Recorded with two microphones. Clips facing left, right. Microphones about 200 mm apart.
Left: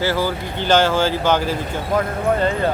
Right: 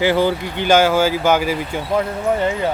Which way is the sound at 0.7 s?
10° right (ahead or behind).